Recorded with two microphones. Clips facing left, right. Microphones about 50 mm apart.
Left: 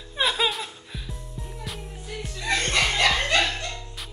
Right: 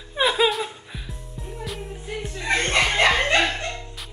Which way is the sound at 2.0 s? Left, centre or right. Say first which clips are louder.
Right 2 dB; right.